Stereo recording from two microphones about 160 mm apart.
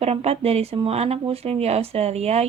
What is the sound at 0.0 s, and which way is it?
Speech, 40° right (ahead or behind).